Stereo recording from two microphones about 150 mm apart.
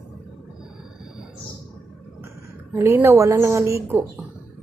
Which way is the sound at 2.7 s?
15° right (ahead or behind).